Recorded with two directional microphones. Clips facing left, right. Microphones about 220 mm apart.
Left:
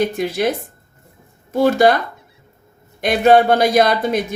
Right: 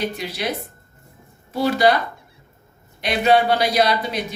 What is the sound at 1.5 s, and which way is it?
Speech, 50° left (ahead or behind).